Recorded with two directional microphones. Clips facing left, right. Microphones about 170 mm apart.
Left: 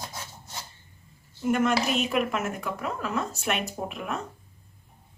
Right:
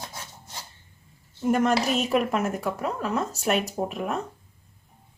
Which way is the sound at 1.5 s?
35° right (ahead or behind).